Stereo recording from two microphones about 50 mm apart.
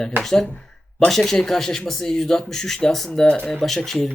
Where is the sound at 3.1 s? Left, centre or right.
Centre.